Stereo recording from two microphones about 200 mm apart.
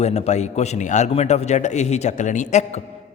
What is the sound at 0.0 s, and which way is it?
A man's voice, 35° left (ahead or behind).